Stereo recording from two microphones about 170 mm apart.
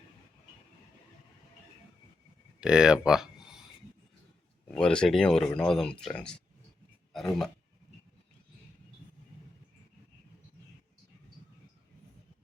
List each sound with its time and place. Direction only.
2.6 s speech: 5° right (ahead or behind)
4.7 s speech: 5° left (ahead or behind)